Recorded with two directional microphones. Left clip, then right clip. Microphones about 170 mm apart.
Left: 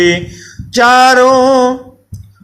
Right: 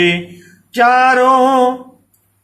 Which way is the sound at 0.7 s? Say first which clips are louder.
Left 4 dB; 40° left (ahead or behind).